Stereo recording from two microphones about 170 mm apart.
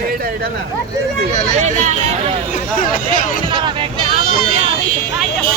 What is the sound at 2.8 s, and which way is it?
Speech, 55° left (ahead or behind).